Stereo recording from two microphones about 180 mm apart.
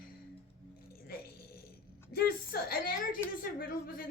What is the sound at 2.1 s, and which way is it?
A woman's voice, 55° left (ahead or behind).